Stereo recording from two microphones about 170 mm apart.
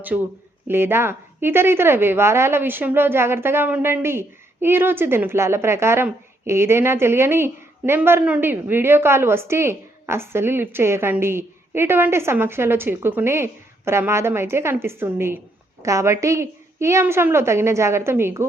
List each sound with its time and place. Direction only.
0.7 s speech: 15° right (ahead or behind)